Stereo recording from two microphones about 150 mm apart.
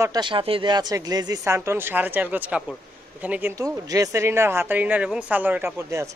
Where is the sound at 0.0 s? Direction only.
30° right (ahead or behind).